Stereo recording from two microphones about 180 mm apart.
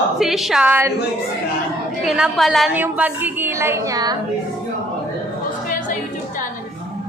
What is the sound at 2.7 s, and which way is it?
A woman's voice, 10° right (ahead or behind).